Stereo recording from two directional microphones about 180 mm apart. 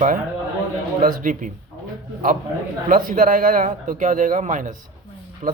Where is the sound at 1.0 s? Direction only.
50° right (ahead or behind).